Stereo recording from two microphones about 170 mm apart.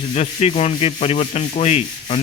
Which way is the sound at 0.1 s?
40° left (ahead or behind).